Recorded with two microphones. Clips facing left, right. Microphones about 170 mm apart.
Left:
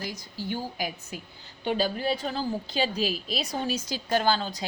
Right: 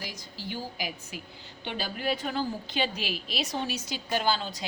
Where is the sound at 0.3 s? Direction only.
50° left (ahead or behind).